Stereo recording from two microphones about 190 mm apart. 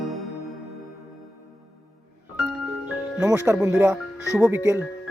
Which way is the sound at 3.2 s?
5° right (ahead or behind).